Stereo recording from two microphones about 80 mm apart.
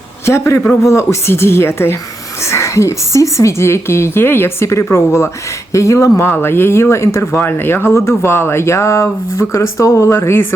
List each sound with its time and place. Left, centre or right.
0.3 s speech: left
6.2 s speech: left